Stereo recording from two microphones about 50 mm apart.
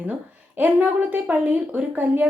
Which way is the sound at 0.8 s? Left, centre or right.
Right.